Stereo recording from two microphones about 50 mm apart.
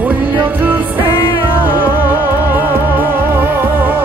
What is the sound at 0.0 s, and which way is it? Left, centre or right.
Music, right.